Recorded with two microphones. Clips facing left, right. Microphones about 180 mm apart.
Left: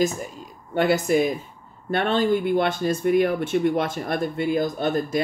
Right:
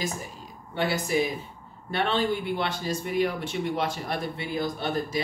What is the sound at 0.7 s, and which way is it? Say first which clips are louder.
Speech: left 6 dB; 50° left (ahead or behind).